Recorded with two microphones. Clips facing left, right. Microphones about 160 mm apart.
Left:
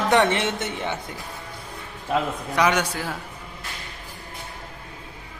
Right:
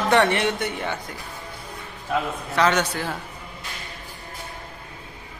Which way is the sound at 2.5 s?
10° left (ahead or behind).